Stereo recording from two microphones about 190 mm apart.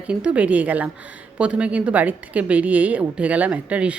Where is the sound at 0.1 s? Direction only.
5° right (ahead or behind).